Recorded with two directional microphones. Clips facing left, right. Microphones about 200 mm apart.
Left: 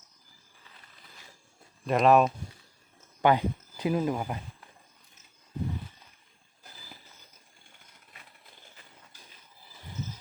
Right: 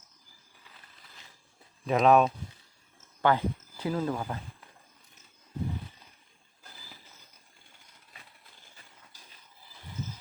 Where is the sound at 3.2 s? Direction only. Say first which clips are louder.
Left 2 dB; 15° left (ahead or behind).